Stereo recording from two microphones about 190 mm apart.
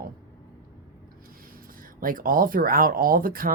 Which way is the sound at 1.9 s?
45° right (ahead or behind).